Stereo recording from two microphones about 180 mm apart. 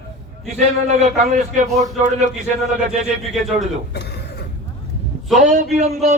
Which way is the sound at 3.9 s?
70° left (ahead or behind).